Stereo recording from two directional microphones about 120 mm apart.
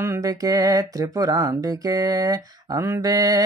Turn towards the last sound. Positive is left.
turn(degrees=-30)  # may be behind; listen again after turning